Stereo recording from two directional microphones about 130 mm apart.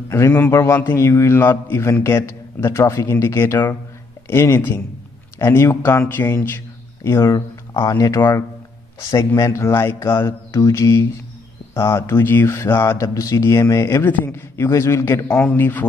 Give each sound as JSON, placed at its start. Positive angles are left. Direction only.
{"t": 0.1, "sound": "a man's voice", "side_deg": 15}